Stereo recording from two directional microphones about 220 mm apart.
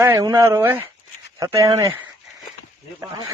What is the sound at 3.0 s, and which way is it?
Speech, 15° right (ahead or behind).